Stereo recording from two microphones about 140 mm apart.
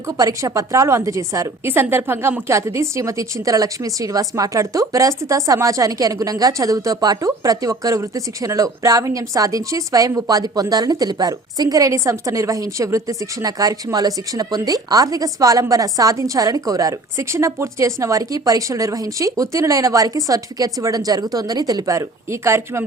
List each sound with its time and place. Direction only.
0.2 s a woman's voice: 25° right (ahead or behind)